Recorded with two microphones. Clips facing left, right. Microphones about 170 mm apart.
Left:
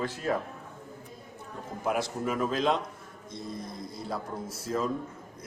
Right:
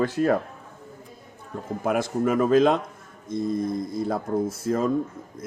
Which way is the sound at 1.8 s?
55° right (ahead or behind).